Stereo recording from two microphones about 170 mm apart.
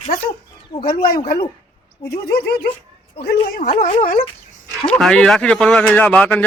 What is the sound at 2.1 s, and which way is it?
Speech, 70° left (ahead or behind).